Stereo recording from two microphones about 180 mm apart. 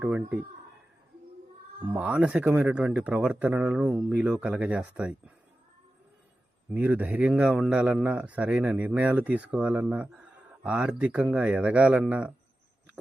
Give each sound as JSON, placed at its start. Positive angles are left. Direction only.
{"t": 0.0, "sound": "a man's voice", "side_deg": -5}
{"t": 1.9, "sound": "a man's voice", "side_deg": -5}
{"t": 6.7, "sound": "a man's voice", "side_deg": -10}